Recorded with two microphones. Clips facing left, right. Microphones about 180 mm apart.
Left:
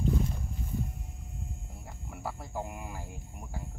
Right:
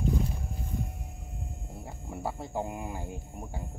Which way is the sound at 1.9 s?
25° right (ahead or behind).